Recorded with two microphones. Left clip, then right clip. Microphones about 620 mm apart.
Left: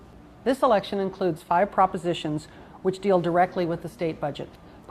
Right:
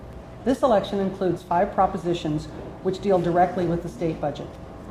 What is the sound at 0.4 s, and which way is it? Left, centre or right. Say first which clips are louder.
A woman's voice: right 1 dB; left.